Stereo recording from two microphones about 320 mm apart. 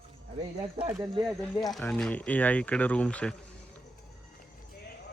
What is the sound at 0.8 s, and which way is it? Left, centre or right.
Speech, centre.